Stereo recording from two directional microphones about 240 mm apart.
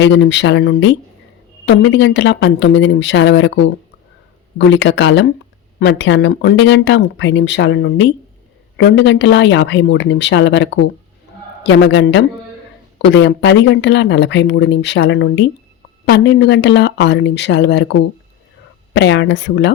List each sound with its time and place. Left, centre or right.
0.0 s speech: left
18.9 s speech: left